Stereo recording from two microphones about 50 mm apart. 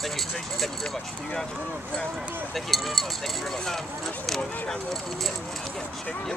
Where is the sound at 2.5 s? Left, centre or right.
Centre.